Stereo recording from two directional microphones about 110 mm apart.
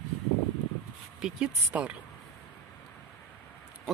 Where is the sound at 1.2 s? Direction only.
10° right (ahead or behind).